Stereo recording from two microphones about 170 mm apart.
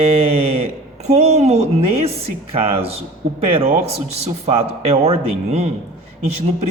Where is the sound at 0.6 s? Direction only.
40° right (ahead or behind).